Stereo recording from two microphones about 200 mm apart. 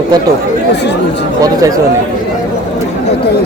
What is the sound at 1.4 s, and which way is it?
Speech, 15° right (ahead or behind).